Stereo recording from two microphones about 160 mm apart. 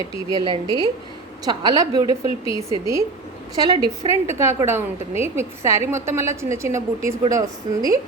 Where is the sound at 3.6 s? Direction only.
25° right (ahead or behind).